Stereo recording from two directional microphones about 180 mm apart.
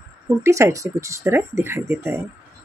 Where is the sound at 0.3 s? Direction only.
15° right (ahead or behind).